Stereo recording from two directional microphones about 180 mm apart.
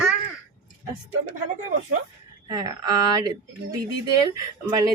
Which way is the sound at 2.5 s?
20° right (ahead or behind).